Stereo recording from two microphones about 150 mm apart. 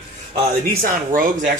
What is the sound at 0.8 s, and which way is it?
Speech, 65° right (ahead or behind).